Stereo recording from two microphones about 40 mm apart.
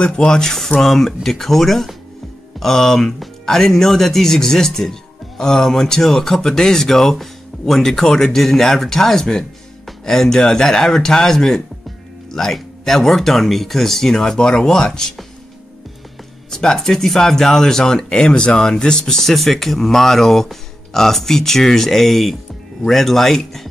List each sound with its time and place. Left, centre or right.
0.0 s speech: centre
16.4 s speech: centre